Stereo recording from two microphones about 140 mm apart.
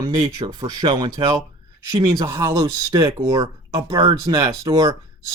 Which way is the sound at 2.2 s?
20° right (ahead or behind).